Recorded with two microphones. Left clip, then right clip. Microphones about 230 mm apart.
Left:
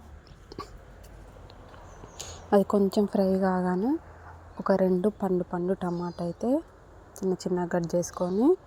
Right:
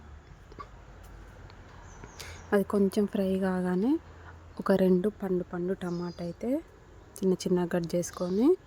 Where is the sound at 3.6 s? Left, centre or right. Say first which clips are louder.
Left 2 dB; centre.